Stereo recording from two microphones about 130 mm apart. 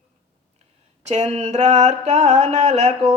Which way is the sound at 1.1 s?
60° right (ahead or behind).